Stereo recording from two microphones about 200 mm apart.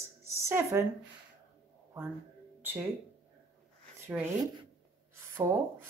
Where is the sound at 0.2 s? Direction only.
15° right (ahead or behind).